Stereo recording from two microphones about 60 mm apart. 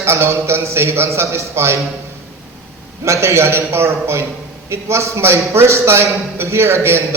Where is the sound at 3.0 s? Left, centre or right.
Right.